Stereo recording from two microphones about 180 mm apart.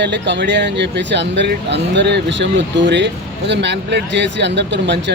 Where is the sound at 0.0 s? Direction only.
75° right (ahead or behind).